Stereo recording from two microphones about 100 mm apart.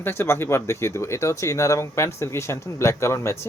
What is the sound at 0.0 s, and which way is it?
Speech, 25° left (ahead or behind).